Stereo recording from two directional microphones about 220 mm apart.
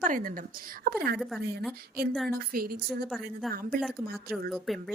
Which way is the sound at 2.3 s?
45° right (ahead or behind).